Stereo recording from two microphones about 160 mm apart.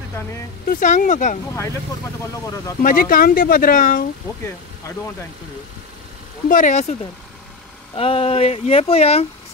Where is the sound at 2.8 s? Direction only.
60° left (ahead or behind).